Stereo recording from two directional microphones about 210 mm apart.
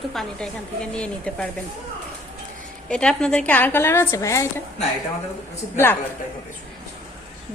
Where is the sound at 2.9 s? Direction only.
5° left (ahead or behind).